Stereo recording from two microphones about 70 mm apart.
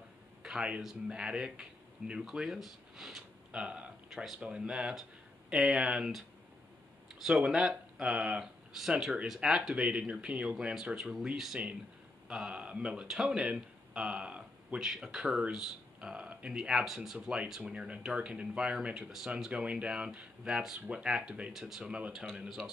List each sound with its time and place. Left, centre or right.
0.4 s speech: centre
3.6 s speech: centre
4.1 s speech: centre
4.4 s speech: centre
7.2 s speech: centre
14.8 s speech: centre
22.4 s speech: centre